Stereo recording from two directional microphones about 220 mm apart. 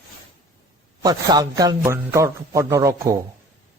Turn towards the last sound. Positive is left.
turn(degrees=-15)  # may be behind; listen again after turning